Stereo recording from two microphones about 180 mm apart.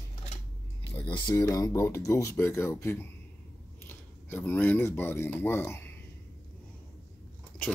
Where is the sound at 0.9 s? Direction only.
25° left (ahead or behind).